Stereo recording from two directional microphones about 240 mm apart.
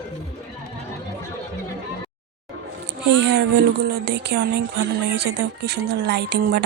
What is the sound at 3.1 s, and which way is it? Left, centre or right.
Speech, right.